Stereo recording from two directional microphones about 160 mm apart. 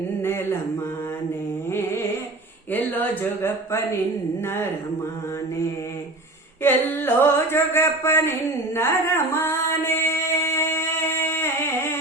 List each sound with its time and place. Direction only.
0.2 s a sound: 15° left (ahead or behind)
2.7 s speech: 10° left (ahead or behind)
6.6 s speech: 15° left (ahead or behind)
8.7 s singing: 15° left (ahead or behind)